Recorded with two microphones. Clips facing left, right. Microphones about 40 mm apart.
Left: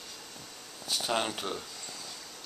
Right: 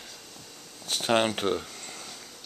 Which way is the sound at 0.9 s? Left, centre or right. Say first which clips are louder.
Right 6 dB; right.